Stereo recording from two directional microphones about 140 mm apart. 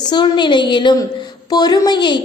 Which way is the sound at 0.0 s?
30° left (ahead or behind).